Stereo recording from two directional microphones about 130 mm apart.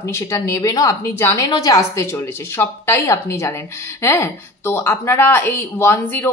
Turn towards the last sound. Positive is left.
turn(degrees=15)  # may be behind; listen again after turning